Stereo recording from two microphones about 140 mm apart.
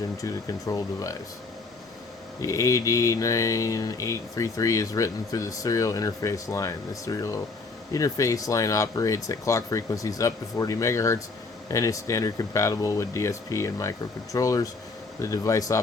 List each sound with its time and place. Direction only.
0.2 s mantra: 25° left (ahead or behind)
2.4 s mantra: 25° left (ahead or behind)